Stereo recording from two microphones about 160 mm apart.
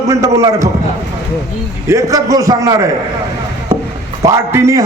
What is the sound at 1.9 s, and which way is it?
Speech, 20° right (ahead or behind).